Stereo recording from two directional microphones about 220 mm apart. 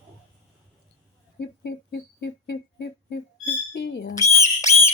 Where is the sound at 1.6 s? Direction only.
50° left (ahead or behind).